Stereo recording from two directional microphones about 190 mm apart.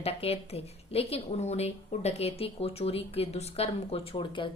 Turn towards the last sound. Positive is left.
turn(degrees=25)  # may be behind; listen again after turning